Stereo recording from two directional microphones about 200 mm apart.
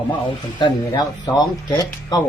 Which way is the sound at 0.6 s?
20° left (ahead or behind).